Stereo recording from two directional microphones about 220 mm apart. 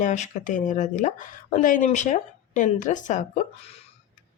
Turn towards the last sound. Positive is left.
turn(degrees=35)  # may be behind; listen again after turning